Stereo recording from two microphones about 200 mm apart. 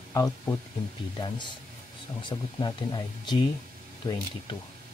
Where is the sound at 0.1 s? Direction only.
15° left (ahead or behind).